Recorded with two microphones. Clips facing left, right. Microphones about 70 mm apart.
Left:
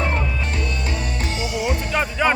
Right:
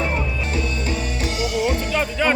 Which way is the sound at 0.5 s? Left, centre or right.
Left.